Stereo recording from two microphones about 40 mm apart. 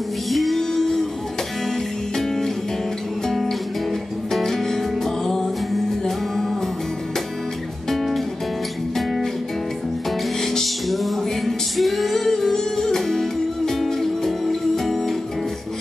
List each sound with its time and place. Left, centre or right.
0.3 s music: centre
4.3 s music: centre
8.9 s music: centre
10.4 s music: centre